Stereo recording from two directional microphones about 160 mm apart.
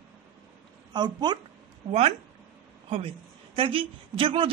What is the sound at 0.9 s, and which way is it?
Speech, 25° right (ahead or behind).